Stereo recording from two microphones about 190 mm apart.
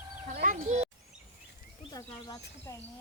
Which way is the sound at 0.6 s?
35° right (ahead or behind).